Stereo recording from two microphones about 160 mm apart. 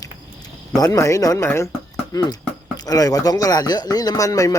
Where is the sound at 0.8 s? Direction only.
20° left (ahead or behind).